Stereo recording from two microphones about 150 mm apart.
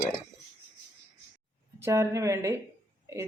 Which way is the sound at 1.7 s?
20° right (ahead or behind).